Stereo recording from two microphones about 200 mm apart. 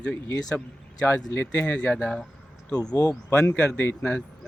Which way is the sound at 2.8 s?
20° left (ahead or behind).